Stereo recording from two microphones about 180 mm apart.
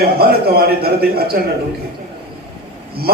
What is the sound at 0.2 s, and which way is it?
Speech, 60° right (ahead or behind).